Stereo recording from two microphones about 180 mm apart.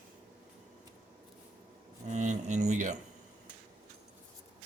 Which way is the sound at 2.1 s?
40° right (ahead or behind).